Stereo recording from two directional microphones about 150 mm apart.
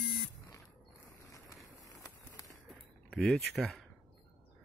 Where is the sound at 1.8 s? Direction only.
25° left (ahead or behind).